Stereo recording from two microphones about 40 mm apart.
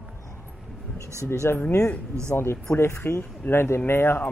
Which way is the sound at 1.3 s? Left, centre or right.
Left.